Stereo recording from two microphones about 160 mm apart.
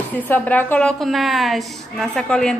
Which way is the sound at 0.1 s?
10° left (ahead or behind).